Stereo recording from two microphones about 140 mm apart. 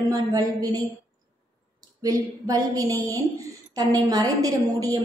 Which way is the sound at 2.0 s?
25° right (ahead or behind).